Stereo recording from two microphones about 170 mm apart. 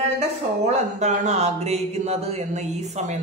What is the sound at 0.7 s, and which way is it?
Speech, 45° right (ahead or behind).